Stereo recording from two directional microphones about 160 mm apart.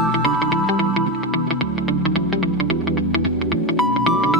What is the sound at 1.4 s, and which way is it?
Music, centre (ahead or behind).